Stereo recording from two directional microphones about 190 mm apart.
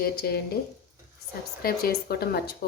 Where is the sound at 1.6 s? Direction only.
55° left (ahead or behind).